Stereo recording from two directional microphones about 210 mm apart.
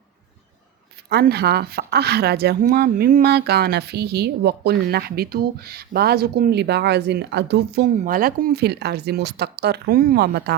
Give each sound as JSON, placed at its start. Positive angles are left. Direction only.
{"t": 1.1, "sound": "a woman's voice", "side_deg": -50}